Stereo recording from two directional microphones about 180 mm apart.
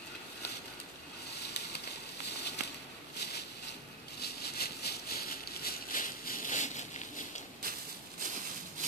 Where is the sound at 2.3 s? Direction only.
70° left (ahead or behind).